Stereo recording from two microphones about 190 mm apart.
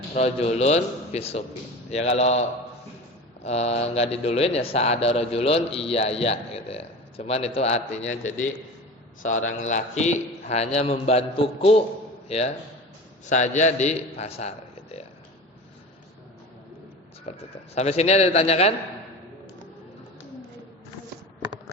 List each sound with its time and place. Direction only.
0.1 s a man's voice: 35° left (ahead or behind)
3.4 s a man's voice: 35° left (ahead or behind)
9.6 s a man's voice: 40° left (ahead or behind)
13.2 s a man's voice: 40° left (ahead or behind)
17.3 s a man's voice: 35° left (ahead or behind)